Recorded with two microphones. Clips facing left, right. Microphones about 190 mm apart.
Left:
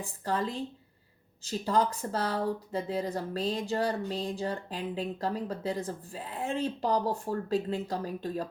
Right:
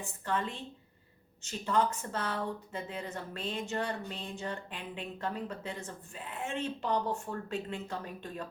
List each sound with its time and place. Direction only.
0.0 s speech: 35° left (ahead or behind)